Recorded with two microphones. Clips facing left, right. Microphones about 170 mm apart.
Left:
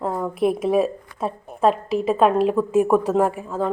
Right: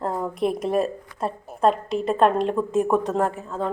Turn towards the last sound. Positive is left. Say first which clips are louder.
# left 3 dB
turn(degrees=10)  # may be behind; listen again after turning